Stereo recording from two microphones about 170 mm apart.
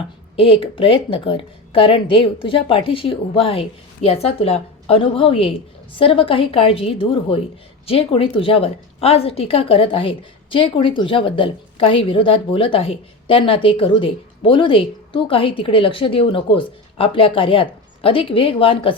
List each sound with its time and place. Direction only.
0.0 s a woman's voice: 35° left (ahead or behind)